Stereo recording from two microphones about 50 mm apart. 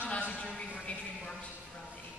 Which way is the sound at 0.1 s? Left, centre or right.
Left.